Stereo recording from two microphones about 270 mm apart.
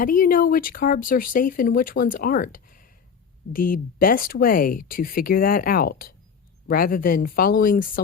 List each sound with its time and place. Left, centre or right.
0.0 s speech: left